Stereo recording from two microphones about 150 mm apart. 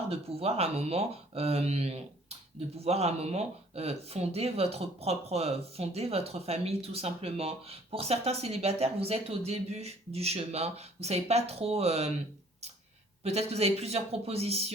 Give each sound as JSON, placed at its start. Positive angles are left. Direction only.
{"t": 0.1, "sound": "speech", "side_deg": -40}
{"t": 13.2, "sound": "speech", "side_deg": -45}